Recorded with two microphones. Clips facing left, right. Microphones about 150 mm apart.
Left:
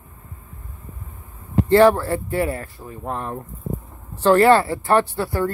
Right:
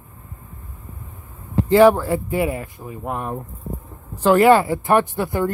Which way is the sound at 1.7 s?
10° right (ahead or behind).